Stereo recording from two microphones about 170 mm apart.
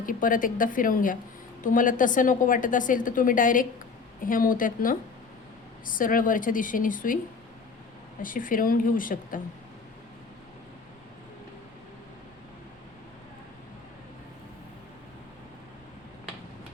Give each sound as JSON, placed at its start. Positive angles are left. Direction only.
{"t": 0.0, "sound": "a woman's voice", "side_deg": 55}
{"t": 8.2, "sound": "a woman's voice", "side_deg": 55}